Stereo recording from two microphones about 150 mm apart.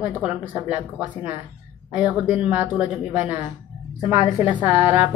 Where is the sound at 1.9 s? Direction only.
10° right (ahead or behind).